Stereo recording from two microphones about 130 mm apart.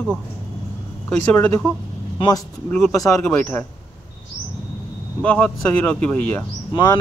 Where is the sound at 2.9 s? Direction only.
25° left (ahead or behind).